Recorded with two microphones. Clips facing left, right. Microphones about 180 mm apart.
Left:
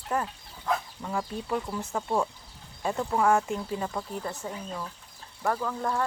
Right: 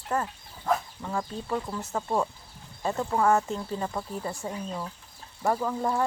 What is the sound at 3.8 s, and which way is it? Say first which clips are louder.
Speech: right 1 dB; 5° right (ahead or behind).